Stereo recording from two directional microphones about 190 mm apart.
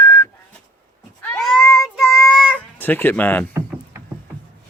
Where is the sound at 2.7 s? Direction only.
10° left (ahead or behind).